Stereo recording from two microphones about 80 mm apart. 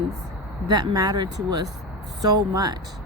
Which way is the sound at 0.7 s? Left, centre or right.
Right.